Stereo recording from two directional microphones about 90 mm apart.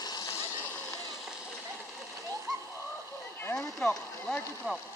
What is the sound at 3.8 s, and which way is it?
Speech, 5° left (ahead or behind).